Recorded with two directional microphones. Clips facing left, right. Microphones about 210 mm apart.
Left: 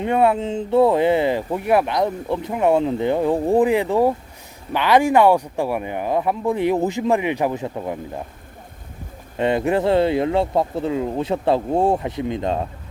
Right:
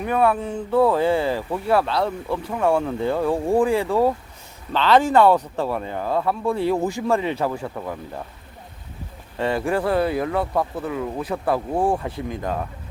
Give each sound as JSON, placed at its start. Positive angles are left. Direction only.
{"t": 0.0, "sound": "speech", "side_deg": 25}
{"t": 9.4, "sound": "speech", "side_deg": 20}